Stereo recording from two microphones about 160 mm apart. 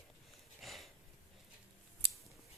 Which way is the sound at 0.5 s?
Centre (ahead or behind).